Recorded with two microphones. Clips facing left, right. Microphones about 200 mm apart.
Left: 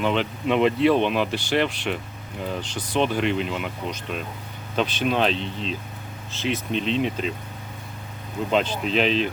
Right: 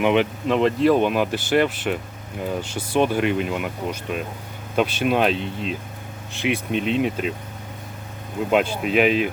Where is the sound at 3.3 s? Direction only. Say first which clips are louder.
Right 2 dB; 55° right (ahead or behind).